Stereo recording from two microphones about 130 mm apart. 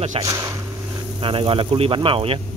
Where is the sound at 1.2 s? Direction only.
45° right (ahead or behind).